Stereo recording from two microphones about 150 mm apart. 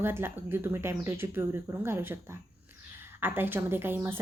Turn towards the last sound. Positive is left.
turn(degrees=-15)  # may be behind; listen again after turning